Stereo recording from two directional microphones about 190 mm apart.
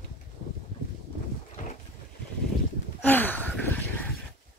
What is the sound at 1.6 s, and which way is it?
Boat, 45° left (ahead or behind).